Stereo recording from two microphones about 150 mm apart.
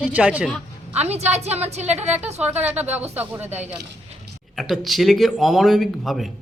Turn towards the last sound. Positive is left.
turn(degrees=0)  # may be behind; listen again after turning